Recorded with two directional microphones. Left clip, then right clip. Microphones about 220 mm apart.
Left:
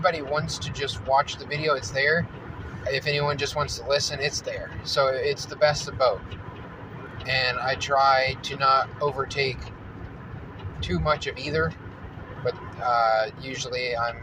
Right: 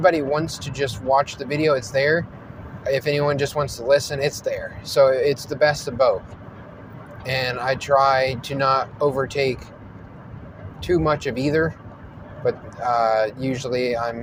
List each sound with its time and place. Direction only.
0.0 s speech: 50° right (ahead or behind)
7.3 s speech: 50° right (ahead or behind)
10.8 s speech: 50° right (ahead or behind)